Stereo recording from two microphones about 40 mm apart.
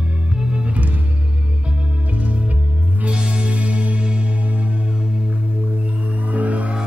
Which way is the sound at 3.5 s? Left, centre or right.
Right.